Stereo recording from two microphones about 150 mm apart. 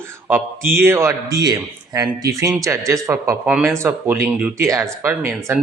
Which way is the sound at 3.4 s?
10° right (ahead or behind).